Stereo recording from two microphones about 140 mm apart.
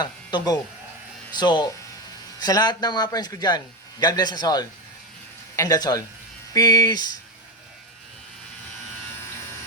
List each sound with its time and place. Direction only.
0.0 s a man's voice: 30° left (ahead or behind)